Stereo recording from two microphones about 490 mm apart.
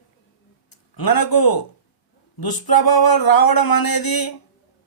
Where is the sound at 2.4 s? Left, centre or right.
Left.